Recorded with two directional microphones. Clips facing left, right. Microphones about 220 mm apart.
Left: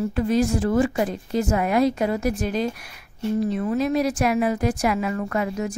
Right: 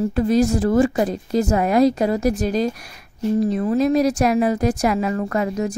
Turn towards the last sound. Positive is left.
turn(degrees=-35)  # may be behind; listen again after turning